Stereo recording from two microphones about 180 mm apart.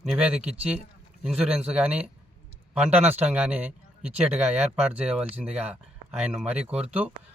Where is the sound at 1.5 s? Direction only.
35° right (ahead or behind).